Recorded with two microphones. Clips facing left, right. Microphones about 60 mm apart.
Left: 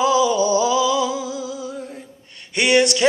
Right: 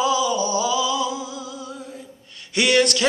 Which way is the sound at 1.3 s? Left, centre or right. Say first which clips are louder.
Left 5 dB; right.